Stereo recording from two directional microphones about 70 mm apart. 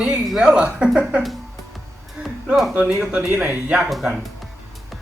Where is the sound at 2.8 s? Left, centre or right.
Centre.